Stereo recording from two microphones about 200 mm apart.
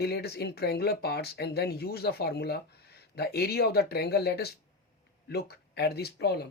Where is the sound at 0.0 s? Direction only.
55° left (ahead or behind).